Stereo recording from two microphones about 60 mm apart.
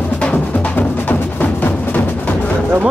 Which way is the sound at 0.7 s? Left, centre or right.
Left.